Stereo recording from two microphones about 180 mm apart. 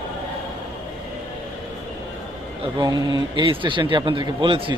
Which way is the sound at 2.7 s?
20° right (ahead or behind).